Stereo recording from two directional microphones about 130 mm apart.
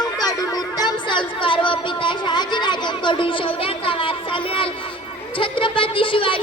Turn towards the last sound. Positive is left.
turn(degrees=40)  # may be behind; listen again after turning